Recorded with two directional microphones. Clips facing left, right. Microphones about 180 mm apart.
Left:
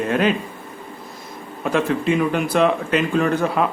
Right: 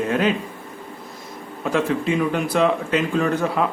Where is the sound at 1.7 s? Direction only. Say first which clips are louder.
Left 2 dB; 60° left (ahead or behind).